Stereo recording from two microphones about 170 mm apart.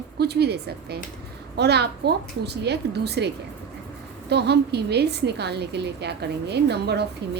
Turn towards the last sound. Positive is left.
turn(degrees=-75)  # may be behind; listen again after turning